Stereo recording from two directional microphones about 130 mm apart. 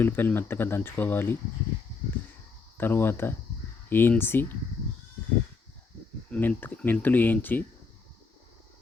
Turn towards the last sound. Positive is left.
turn(degrees=15)  # may be behind; listen again after turning